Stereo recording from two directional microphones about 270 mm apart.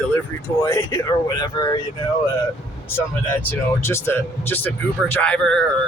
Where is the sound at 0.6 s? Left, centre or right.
Centre.